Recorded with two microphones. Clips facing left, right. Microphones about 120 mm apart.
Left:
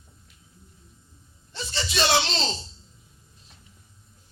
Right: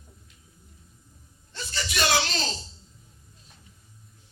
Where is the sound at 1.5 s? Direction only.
25° left (ahead or behind).